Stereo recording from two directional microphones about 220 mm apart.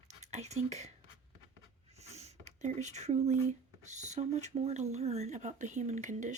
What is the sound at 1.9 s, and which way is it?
Speech, 30° right (ahead or behind).